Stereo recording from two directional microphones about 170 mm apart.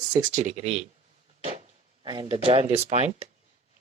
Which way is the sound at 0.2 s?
50° right (ahead or behind).